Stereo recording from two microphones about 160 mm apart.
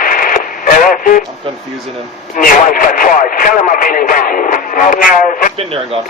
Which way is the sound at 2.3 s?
60° left (ahead or behind).